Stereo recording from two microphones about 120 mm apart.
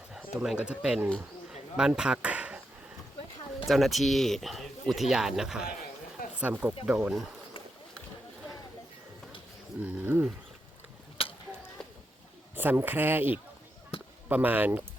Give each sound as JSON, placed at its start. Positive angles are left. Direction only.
{"t": 0.2, "sound": "speech", "side_deg": -10}
{"t": 3.7, "sound": "speech", "side_deg": 0}
{"t": 9.8, "sound": "speech", "side_deg": -15}
{"t": 11.2, "sound": "a sound", "side_deg": 50}
{"t": 12.5, "sound": "speech", "side_deg": -15}